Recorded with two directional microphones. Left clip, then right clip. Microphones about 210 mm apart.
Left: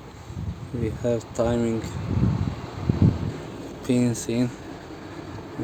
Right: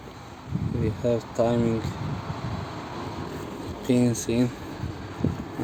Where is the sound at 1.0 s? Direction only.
Centre (ahead or behind).